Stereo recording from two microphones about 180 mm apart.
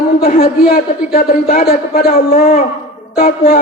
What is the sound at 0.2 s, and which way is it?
A man's voice, 55° left (ahead or behind).